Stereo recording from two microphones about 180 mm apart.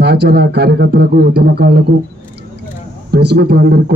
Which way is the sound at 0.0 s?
65° right (ahead or behind).